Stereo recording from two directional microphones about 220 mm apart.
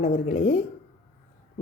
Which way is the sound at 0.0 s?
35° left (ahead or behind).